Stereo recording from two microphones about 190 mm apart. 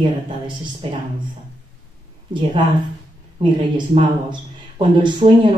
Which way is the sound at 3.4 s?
25° right (ahead or behind).